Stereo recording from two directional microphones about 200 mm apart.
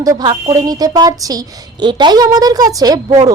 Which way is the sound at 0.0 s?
20° right (ahead or behind).